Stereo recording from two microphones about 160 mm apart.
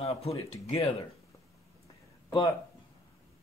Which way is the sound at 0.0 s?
40° left (ahead or behind).